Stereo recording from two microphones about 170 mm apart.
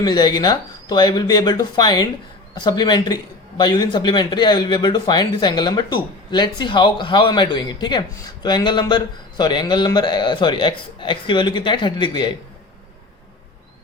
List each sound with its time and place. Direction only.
0.0 s speech: 25° left (ahead or behind)